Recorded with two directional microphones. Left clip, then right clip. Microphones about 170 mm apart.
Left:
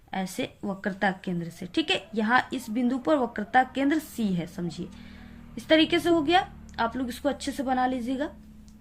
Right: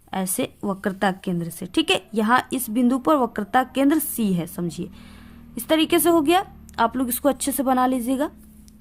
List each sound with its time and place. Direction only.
0.1 s a woman's voice: 50° right (ahead or behind)